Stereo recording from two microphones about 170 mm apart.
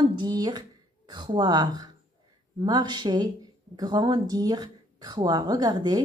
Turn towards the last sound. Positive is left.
turn(degrees=-25)  # may be behind; listen again after turning